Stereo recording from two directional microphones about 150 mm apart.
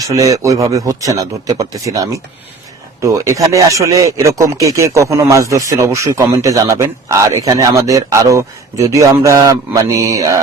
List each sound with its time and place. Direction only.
0.0 s speech: 20° right (ahead or behind)